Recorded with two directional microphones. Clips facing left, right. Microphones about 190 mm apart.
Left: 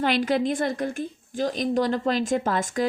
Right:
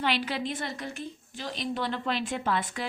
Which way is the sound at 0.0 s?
45° left (ahead or behind).